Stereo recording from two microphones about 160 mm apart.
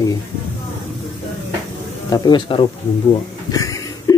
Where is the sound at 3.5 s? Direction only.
20° left (ahead or behind).